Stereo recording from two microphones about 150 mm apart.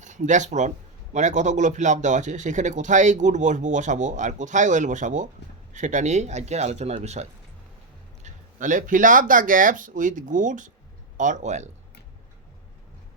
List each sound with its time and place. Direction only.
0.0 s speech: 55° right (ahead or behind)
8.2 s speech: 60° right (ahead or behind)